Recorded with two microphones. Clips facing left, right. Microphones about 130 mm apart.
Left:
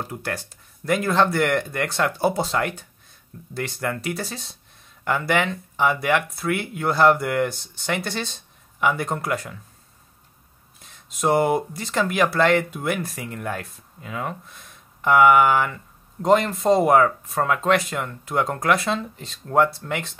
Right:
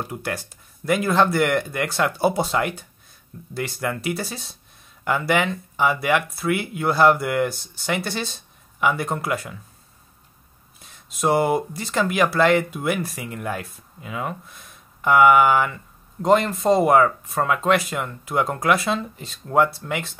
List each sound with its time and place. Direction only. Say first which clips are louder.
0.0 s speech: right 1 dB; 10° right (ahead or behind)
10.8 s speech: right 1 dB; 5° right (ahead or behind)